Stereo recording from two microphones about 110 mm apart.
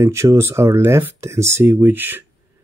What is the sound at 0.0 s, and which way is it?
Speech, 25° right (ahead or behind).